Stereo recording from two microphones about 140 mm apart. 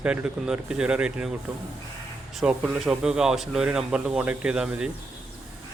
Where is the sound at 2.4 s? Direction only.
5° right (ahead or behind).